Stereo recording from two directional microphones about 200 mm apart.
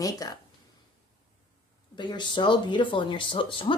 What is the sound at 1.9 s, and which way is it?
Speech, 25° left (ahead or behind).